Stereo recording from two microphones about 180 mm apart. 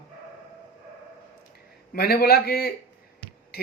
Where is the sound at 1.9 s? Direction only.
60° left (ahead or behind).